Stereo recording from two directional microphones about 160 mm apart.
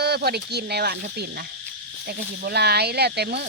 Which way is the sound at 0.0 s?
85° right.